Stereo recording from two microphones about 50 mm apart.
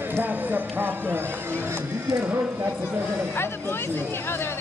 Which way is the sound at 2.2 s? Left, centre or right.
Right.